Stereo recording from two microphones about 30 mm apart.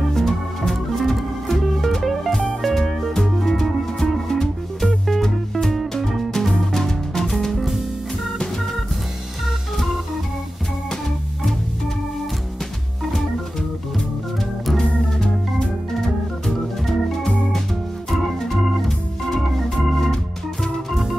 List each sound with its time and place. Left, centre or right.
0.1 s music: centre
16.0 s organ: centre
19.5 s organ: centre